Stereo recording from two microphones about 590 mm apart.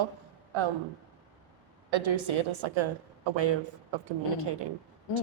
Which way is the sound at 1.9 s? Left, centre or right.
Right.